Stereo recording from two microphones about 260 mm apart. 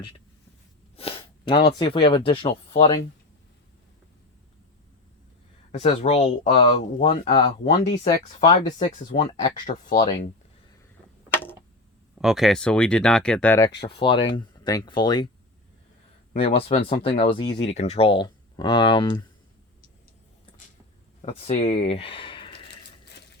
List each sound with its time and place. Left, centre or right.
0.9 s a sound: left
1.7 s speech: centre
5.7 s speech: left
9.2 s speech: centre
11.3 s a sound: centre
12.2 s speech: centre
13.8 s speech: centre
16.3 s speech: left
21.2 s speech: left